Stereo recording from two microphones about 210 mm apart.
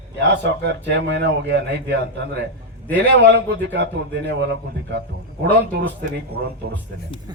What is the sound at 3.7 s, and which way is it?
Speech, 55° right (ahead or behind).